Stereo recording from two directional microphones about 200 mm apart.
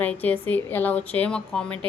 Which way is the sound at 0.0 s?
10° left (ahead or behind).